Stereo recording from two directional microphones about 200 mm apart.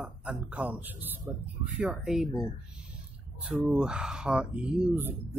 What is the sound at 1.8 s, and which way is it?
Speech, 5° right (ahead or behind).